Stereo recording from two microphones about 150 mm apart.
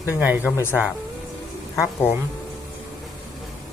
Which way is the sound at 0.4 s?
15° left (ahead or behind).